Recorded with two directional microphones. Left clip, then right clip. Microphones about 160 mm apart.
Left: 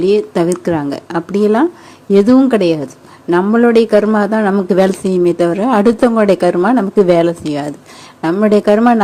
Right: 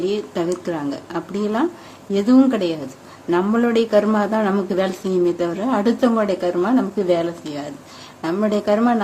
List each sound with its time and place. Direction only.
0.0 s speech: 40° left (ahead or behind)